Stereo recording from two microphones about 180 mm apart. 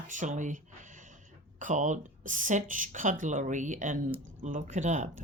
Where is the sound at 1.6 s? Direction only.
45° right (ahead or behind).